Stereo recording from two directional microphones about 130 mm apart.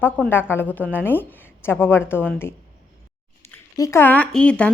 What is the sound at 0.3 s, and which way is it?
A woman's voice, 15° left (ahead or behind).